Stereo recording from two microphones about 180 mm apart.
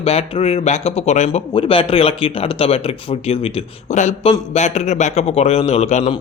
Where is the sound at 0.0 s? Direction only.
35° left (ahead or behind).